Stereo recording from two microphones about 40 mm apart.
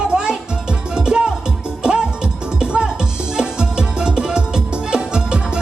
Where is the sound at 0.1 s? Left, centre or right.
Right.